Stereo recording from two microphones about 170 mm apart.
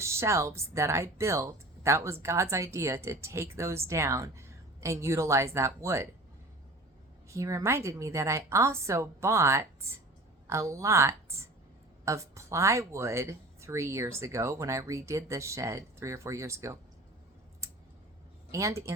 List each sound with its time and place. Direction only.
0.0 s speech: 15° right (ahead or behind)
7.3 s speech: 20° right (ahead or behind)
17.6 s a sound: 15° right (ahead or behind)
18.5 s speech: 15° right (ahead or behind)